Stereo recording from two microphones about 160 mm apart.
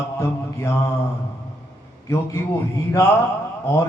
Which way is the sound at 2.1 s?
15° left (ahead or behind).